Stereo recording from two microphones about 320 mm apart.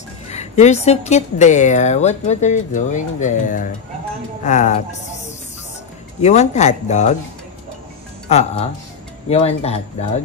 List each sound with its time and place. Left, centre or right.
0.3 s a woman's voice: left
6.2 s a woman's voice: left
8.3 s a woman's voice: centre